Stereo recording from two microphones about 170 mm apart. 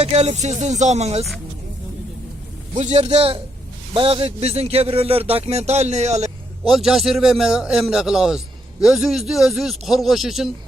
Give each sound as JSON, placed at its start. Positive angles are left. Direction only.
{"t": 0.0, "sound": "a man's voice", "side_deg": -40}
{"t": 2.8, "sound": "a man's voice", "side_deg": -35}
{"t": 6.7, "sound": "a man's voice", "side_deg": 0}